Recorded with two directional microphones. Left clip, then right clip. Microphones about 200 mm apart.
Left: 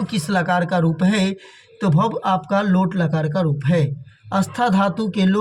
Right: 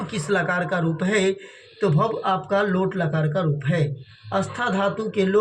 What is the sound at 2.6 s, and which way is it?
Speech, 50° left (ahead or behind).